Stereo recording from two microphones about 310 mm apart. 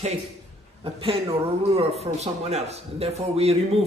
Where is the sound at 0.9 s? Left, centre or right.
Centre.